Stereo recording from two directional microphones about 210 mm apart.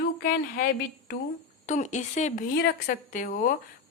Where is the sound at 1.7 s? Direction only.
35° left (ahead or behind).